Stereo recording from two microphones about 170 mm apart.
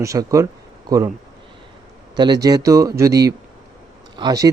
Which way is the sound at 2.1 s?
25° right (ahead or behind).